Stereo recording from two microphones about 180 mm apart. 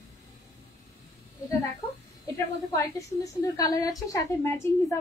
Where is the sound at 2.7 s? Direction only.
20° left (ahead or behind).